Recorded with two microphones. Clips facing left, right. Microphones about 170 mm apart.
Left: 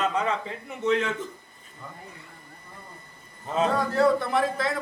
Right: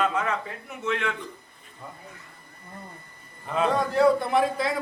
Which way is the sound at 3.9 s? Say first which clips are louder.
Right 2 dB; centre (ahead or behind).